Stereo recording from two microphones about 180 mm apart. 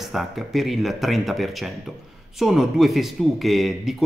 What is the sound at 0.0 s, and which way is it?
Speech, centre (ahead or behind).